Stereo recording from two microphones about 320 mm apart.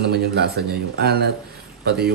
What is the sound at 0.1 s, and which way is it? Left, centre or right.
Speech, right.